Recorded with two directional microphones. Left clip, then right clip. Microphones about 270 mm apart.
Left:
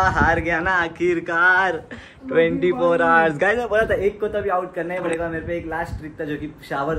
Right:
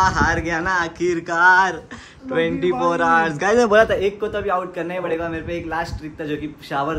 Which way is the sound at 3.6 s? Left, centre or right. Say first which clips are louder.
Right 6 dB; right.